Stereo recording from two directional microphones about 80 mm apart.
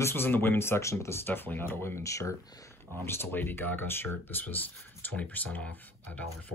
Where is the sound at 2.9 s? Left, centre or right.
Left.